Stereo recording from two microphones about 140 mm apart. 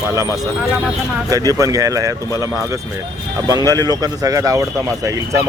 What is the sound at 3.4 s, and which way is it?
Speech, 25° right (ahead or behind).